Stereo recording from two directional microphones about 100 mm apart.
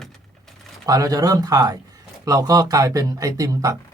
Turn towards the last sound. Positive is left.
turn(degrees=-35)  # may be behind; listen again after turning